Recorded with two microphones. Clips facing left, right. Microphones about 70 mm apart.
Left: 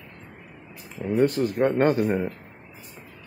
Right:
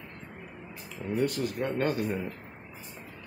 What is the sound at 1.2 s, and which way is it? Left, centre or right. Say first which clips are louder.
A man's voice: left 9 dB; left.